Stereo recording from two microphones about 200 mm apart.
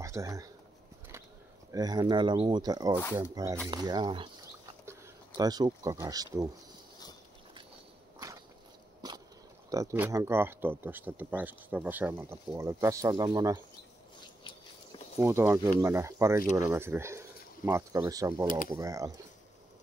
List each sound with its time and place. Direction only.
0.0 s speech: 15° right (ahead or behind)
1.7 s speech: 20° right (ahead or behind)
5.4 s speech: 20° right (ahead or behind)
9.0 s a sound: 20° right (ahead or behind)
9.7 s speech: 15° right (ahead or behind)
15.1 s speech: 10° right (ahead or behind)